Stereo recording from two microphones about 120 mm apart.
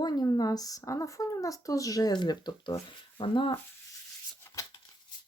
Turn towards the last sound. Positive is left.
turn(degrees=25)  # may be behind; listen again after turning